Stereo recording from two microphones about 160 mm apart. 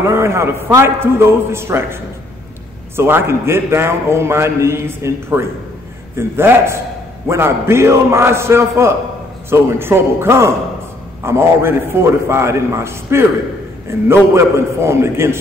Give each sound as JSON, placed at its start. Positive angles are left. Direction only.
{"t": 0.1, "sound": "a man's voice", "side_deg": -15}
{"t": 3.0, "sound": "a man's voice", "side_deg": -15}